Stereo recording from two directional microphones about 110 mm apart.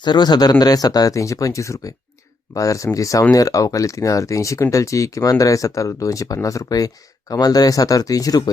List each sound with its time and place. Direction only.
0.0 s speech: 40° left (ahead or behind)